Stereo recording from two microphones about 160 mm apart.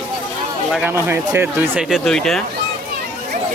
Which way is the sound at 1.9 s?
Centre (ahead or behind).